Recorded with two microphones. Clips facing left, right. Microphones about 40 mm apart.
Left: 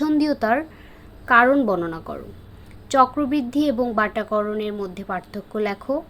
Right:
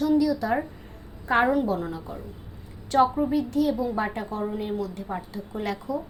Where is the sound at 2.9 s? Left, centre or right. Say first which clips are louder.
Left 4 dB; left.